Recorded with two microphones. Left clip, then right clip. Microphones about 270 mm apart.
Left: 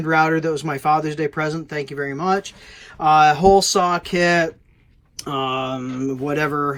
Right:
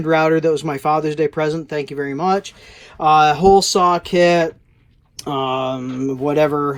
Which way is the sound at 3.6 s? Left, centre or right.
Centre.